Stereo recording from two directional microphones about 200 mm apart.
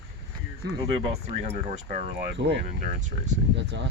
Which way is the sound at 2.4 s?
60° right (ahead or behind).